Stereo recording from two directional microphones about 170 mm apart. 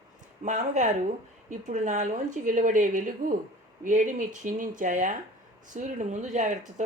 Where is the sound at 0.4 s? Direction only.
50° right (ahead or behind).